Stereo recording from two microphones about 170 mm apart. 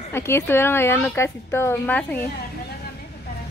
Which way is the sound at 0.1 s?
15° left (ahead or behind).